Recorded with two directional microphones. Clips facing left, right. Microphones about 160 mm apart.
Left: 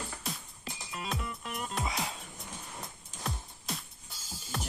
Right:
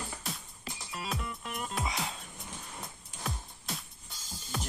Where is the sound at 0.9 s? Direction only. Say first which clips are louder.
Even; centre (ahead or behind).